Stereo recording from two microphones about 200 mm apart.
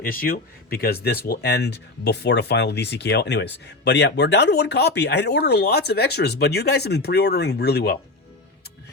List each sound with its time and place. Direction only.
0.0 s speech: 45° left (ahead or behind)